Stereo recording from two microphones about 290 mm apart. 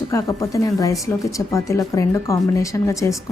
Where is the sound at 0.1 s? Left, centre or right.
Centre.